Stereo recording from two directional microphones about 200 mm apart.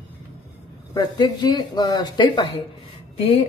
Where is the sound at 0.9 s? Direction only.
20° left (ahead or behind).